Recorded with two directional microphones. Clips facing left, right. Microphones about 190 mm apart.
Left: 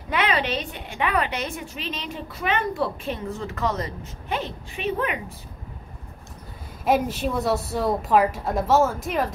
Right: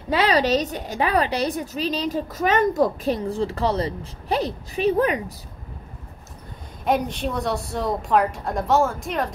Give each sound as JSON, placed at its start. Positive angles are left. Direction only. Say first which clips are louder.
{"t": 0.1, "sound": "a woman's voice", "louder": "right 5 dB", "side_deg": -35}
{"t": 6.8, "sound": "a woman's voice", "louder": "left 1 dB", "side_deg": 5}